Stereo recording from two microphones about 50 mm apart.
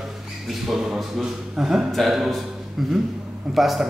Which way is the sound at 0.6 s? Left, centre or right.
Centre.